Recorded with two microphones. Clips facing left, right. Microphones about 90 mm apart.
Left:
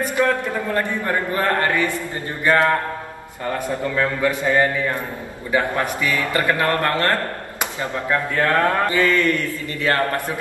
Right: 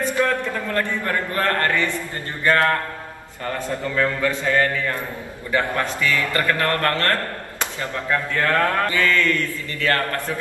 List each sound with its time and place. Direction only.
0.1 s a man's voice: 20° left (ahead or behind)
5.5 s mantra: 15° left (ahead or behind)